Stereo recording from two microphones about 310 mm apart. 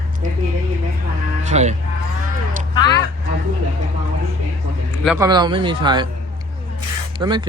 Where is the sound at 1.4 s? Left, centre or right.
Right.